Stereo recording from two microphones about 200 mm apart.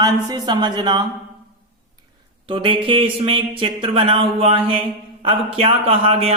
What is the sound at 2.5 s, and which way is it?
Speech, 25° right (ahead or behind).